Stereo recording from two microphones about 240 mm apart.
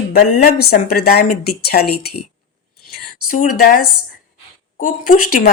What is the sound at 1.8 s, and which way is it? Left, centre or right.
Speech, left.